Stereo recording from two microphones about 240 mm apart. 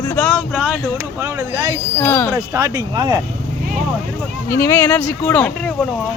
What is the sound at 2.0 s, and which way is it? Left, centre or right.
Speech, centre.